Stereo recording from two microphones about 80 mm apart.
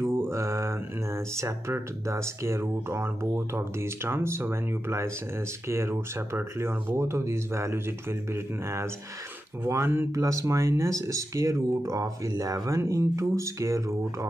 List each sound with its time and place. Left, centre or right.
0.0 s speech: right
10.1 s speech: right